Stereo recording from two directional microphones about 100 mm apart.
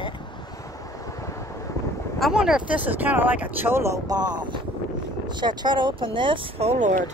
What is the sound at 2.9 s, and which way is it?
Speech, 20° right (ahead or behind).